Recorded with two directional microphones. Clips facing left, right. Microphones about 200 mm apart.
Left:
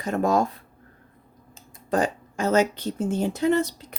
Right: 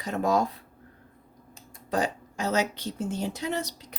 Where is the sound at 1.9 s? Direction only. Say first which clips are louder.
Left 4 dB; 50° left (ahead or behind).